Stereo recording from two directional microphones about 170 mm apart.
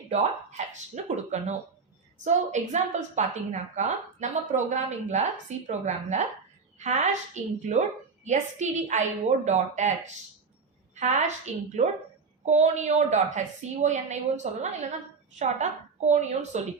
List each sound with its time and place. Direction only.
0.1 s a woman's voice: 45° right (ahead or behind)
11.0 s a woman's voice: 45° right (ahead or behind)